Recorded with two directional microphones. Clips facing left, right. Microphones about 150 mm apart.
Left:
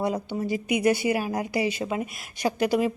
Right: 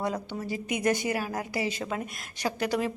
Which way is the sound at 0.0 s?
15° left (ahead or behind).